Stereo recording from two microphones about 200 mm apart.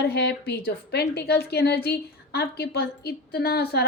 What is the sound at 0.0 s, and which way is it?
A woman's voice, 55° left (ahead or behind).